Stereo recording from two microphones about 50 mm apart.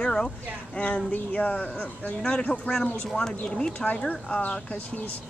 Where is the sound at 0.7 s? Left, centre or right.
Left.